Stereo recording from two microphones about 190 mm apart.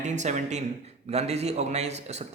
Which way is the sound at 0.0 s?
40° right (ahead or behind).